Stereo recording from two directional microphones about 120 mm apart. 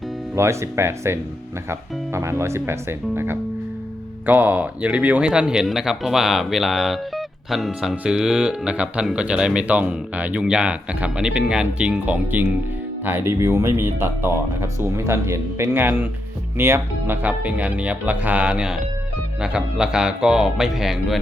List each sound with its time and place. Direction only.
0.3 s speech: 25° right (ahead or behind)
4.3 s speech: 15° right (ahead or behind)